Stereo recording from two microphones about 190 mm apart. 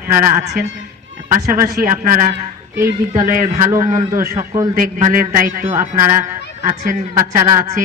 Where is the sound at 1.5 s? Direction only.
50° right (ahead or behind).